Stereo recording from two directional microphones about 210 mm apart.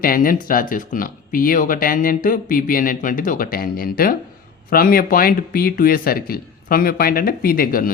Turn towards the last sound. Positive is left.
turn(degrees=45)  # may be behind; listen again after turning